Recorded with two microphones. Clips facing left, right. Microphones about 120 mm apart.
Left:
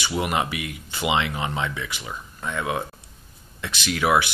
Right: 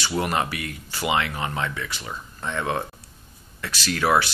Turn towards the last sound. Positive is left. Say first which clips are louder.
# even
turn(degrees=15)  # may be behind; listen again after turning